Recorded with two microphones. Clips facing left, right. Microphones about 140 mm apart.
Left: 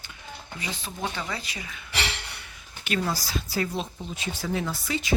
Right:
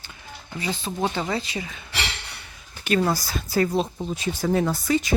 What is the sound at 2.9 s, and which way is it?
Speech, 50° right (ahead or behind).